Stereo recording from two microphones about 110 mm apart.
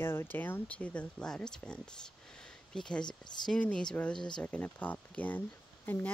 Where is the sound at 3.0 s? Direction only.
40° left (ahead or behind).